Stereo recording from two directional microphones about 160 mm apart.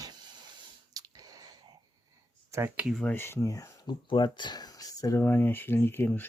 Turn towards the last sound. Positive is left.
turn(degrees=10)  # may be behind; listen again after turning